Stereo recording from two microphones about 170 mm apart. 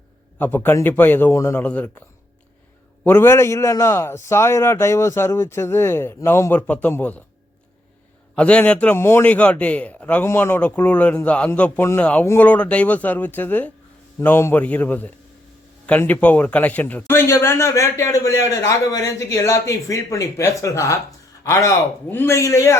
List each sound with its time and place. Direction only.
0.3 s a man's voice: 10° left (ahead or behind)
8.4 s a man's voice: 5° left (ahead or behind)